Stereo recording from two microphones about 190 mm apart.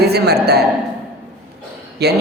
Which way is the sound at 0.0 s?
60° right (ahead or behind).